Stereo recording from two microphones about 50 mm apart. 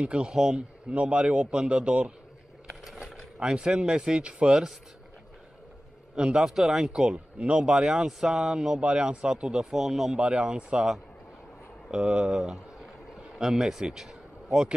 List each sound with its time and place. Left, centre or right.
0.0 s a man's voice: centre
3.3 s speech: centre
6.1 s a man's voice: centre
6.5 s speech: centre
6.9 s speech: centre
8.8 s speech: right; by 10.1 s centre
10.1 s a man's voice: centre
13.4 s speech: centre